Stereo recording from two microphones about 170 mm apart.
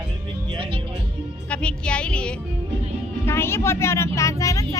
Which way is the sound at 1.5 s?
5° left (ahead or behind).